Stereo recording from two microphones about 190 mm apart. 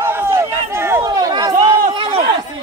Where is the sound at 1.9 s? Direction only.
30° right (ahead or behind).